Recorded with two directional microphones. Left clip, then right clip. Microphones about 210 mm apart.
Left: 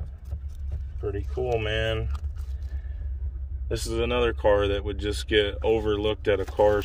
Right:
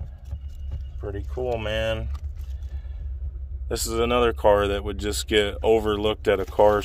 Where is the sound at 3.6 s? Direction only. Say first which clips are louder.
Right 3 dB; 30° right (ahead or behind).